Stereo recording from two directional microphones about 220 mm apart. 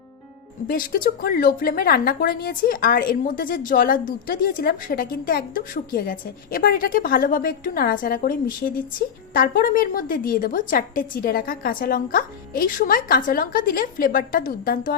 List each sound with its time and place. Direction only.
0.7 s a woman's voice: 40° left (ahead or behind)